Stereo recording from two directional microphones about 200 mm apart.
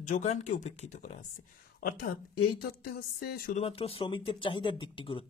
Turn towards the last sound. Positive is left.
turn(degrees=25)  # may be behind; listen again after turning